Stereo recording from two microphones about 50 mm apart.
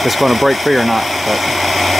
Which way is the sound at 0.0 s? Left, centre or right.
Centre.